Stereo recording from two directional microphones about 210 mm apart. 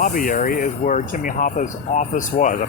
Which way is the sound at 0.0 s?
40° left (ahead or behind).